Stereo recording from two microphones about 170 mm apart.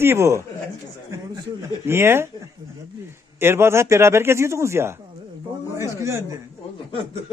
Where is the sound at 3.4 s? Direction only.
15° right (ahead or behind).